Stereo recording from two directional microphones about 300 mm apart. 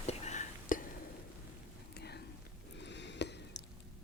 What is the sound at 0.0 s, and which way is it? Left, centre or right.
Whispering, left.